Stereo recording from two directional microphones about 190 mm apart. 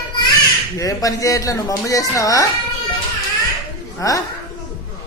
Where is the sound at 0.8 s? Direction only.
20° left (ahead or behind).